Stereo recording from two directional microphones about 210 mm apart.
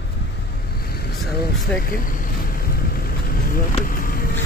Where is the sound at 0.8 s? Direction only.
50° left (ahead or behind).